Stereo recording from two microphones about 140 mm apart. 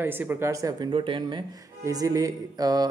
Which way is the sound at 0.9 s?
35° right (ahead or behind).